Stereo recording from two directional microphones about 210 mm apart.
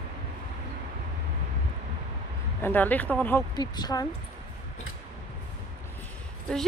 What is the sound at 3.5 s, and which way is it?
Speech, 20° left (ahead or behind).